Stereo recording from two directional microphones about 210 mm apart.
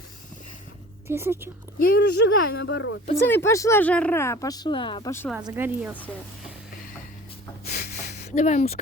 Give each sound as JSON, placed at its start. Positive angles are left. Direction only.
{"t": 1.0, "sound": "speech", "side_deg": -10}
{"t": 1.8, "sound": "speech", "side_deg": 45}
{"t": 3.2, "sound": "speech", "side_deg": 10}
{"t": 5.4, "sound": "speech", "side_deg": -15}
{"t": 7.7, "sound": "a sound", "side_deg": 45}